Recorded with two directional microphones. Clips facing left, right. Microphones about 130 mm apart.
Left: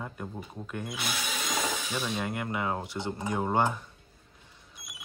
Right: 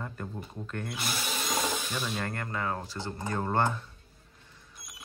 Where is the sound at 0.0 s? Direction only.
5° left (ahead or behind).